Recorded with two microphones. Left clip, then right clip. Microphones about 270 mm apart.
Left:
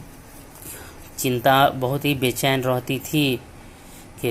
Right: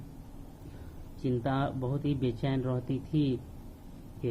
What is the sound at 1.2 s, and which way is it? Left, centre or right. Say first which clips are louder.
Speech: left 15 dB; centre.